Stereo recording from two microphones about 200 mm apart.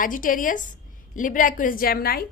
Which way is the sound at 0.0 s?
40° left (ahead or behind).